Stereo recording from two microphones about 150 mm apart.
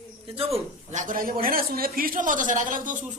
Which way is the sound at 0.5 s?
55° right (ahead or behind).